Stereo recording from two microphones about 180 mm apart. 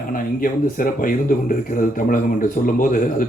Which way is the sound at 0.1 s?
50° left (ahead or behind).